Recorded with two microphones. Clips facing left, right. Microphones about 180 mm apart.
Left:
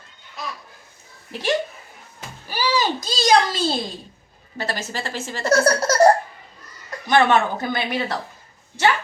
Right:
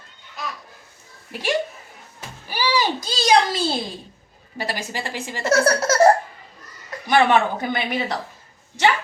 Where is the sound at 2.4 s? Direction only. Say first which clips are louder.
Even; 10° right (ahead or behind).